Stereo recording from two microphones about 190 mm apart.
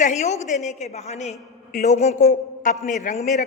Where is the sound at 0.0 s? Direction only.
40° left (ahead or behind).